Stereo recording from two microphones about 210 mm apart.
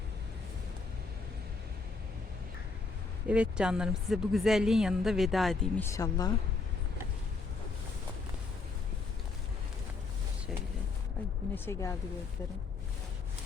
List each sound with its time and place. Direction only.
3.2 s speech: 5° right (ahead or behind)
5.8 s speech: 15° left (ahead or behind)
11.5 s speech: 10° left (ahead or behind)